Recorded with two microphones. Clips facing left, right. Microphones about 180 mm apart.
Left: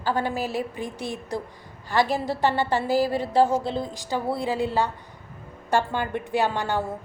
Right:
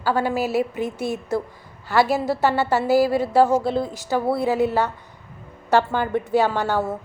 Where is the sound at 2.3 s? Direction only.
45° right (ahead or behind).